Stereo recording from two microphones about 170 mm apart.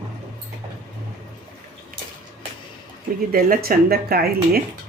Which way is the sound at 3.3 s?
55° right (ahead or behind).